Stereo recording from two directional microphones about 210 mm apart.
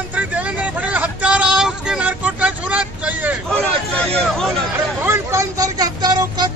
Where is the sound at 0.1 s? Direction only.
5° right (ahead or behind).